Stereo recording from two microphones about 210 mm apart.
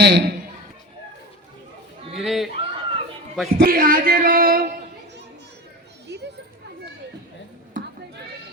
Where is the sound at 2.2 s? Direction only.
Centre (ahead or behind).